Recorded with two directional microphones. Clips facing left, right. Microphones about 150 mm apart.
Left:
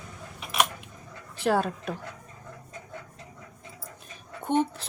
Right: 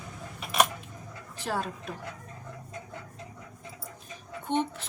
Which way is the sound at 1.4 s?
70° left (ahead or behind).